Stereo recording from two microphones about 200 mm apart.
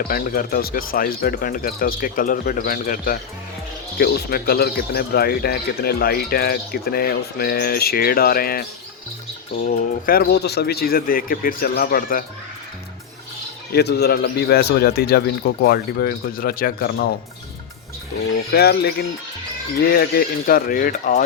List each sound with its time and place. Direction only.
0.1 s speech: 45° left (ahead or behind)
9.6 s speech: 45° left (ahead or behind)
13.7 s speech: 55° left (ahead or behind)
18.5 s speech: 55° left (ahead or behind)